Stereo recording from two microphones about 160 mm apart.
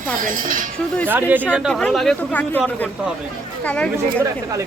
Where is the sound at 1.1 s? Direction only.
10° right (ahead or behind).